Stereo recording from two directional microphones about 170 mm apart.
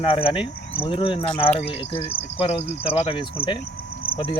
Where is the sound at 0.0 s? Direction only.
30° left (ahead or behind).